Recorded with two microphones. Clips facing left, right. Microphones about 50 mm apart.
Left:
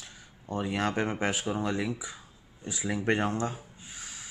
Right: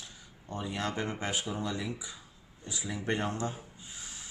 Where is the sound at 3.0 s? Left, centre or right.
Left.